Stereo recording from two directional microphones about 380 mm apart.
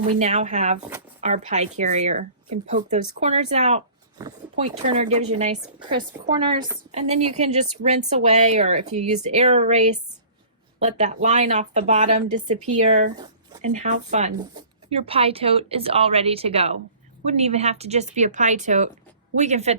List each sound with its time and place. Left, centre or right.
0.2 s speech: centre
0.9 s a sound: centre
1.3 s speech: centre